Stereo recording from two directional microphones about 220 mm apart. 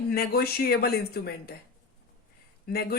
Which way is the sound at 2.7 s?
45° left (ahead or behind).